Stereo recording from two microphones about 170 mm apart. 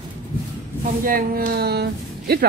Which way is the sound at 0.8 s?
55° right (ahead or behind).